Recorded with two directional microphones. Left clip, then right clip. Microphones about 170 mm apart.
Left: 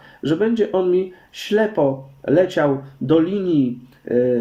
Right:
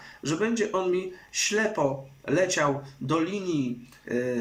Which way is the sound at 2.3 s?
45° left (ahead or behind).